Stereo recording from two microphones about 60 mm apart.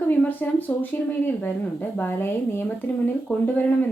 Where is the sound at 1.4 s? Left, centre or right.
Left.